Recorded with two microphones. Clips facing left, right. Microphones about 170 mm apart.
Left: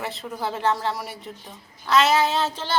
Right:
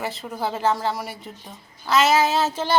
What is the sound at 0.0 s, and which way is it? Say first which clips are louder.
Speech: right 2 dB; centre (ahead or behind).